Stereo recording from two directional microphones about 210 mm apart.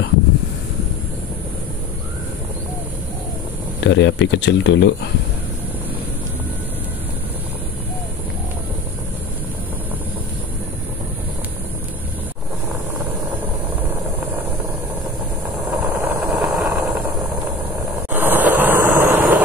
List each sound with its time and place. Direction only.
3.8 s speech: 60° left (ahead or behind)
15.8 s vehicle: 10° right (ahead or behind)
18.1 s vehicle: 10° right (ahead or behind)